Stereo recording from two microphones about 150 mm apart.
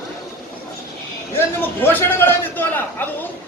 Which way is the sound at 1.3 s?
15° left (ahead or behind).